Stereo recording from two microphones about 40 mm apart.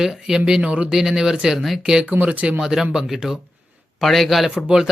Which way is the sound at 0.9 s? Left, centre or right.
Centre.